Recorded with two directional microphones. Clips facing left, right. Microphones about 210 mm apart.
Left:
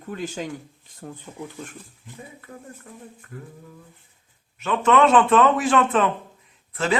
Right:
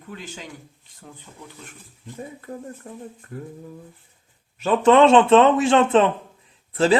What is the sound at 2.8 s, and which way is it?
Speech, 40° right (ahead or behind).